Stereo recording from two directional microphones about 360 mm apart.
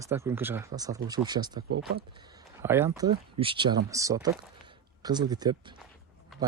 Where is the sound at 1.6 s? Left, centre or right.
Right.